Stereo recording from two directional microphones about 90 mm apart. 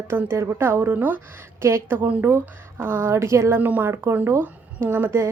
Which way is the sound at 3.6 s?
20° right (ahead or behind).